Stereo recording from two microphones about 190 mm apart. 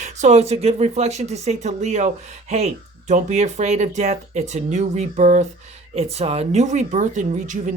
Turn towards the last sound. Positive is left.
turn(degrees=-40)  # may be behind; listen again after turning